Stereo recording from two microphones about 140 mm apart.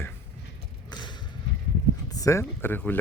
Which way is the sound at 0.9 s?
35° left (ahead or behind).